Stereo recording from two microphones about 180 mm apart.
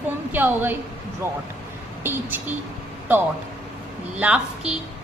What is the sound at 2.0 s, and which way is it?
Speech, 10° right (ahead or behind).